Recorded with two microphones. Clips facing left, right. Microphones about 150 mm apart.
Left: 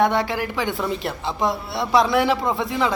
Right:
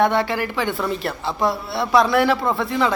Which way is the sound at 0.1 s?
15° left (ahead or behind).